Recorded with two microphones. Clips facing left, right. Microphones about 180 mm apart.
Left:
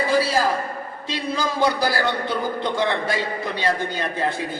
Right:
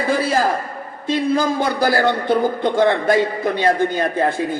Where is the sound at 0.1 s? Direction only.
50° right (ahead or behind).